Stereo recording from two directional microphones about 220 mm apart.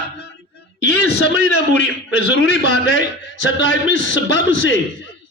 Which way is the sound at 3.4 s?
55° left (ahead or behind).